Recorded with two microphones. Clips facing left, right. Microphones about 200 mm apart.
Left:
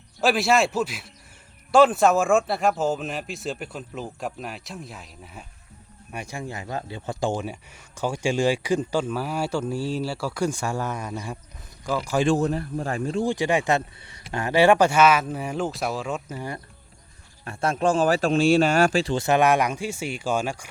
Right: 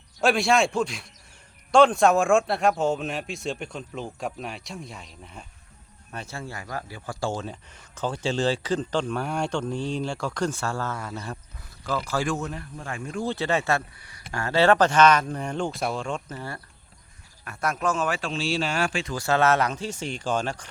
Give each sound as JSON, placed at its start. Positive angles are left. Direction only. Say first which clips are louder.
{"t": 0.2, "sound": "speech", "louder": "left 1 dB", "side_deg": 0}
{"t": 12.3, "sound": "a man's voice", "louder": "left 8 dB", "side_deg": 35}
{"t": 13.1, "sound": "speech", "louder": "left 2 dB", "side_deg": 15}
{"t": 17.4, "sound": "a man's voice", "louder": "left 4 dB", "side_deg": 30}
{"t": 19.1, "sound": "speech", "louder": "right 2 dB", "side_deg": 20}